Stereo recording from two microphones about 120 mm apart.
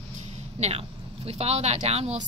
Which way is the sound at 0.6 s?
60° right (ahead or behind).